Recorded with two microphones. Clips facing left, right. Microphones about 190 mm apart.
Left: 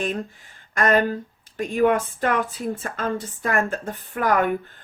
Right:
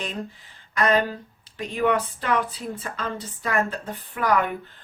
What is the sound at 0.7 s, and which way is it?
Speech, 45° left (ahead or behind).